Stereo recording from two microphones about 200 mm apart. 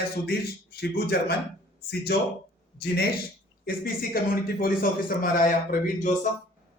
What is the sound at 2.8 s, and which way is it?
Speech, 50° left (ahead or behind).